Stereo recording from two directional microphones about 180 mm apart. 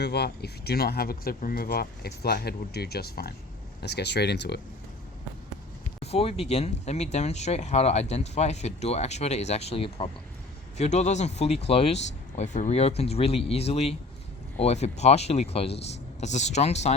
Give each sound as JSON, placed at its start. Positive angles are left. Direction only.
{"t": 0.0, "sound": "speech", "side_deg": 65}
{"t": 6.0, "sound": "speech", "side_deg": 35}